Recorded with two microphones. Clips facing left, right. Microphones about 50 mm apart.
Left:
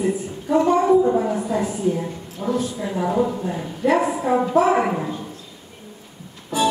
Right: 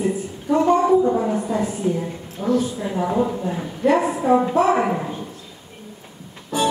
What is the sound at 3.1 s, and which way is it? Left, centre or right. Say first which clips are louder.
A woman's voice: left 1 dB; centre.